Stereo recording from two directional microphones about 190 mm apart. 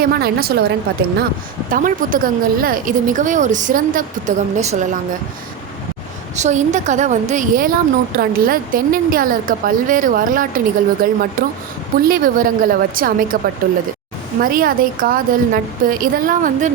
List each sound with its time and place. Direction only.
0.0 s a woman's voice: 55° right (ahead or behind)
1.7 s a woman's voice: 45° right (ahead or behind)
6.3 s a woman's voice: 40° right (ahead or behind)